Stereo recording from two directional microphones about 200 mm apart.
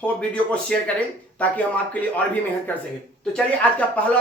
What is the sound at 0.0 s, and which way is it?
Speech, 5° left (ahead or behind).